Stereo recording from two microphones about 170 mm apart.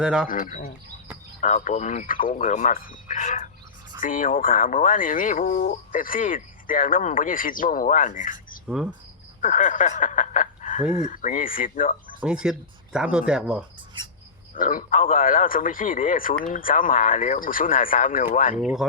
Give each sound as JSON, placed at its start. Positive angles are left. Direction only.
{"t": 0.0, "sound": "speech", "side_deg": -5}
{"t": 0.3, "sound": "speech", "side_deg": 55}
{"t": 8.6, "sound": "cricket", "side_deg": -5}
{"t": 9.4, "sound": "speech", "side_deg": 45}
{"t": 12.2, "sound": "speech", "side_deg": -5}
{"t": 14.5, "sound": "speech", "side_deg": 50}
{"t": 18.6, "sound": "speech", "side_deg": -5}